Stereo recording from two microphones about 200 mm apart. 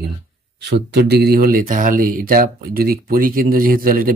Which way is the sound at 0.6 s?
55° right (ahead or behind).